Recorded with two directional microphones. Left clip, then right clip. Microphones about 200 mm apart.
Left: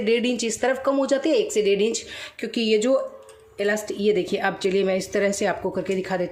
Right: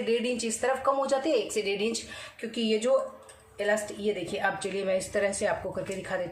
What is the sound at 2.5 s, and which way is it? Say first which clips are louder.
A woman's voice: left 5 dB; 50° left (ahead or behind).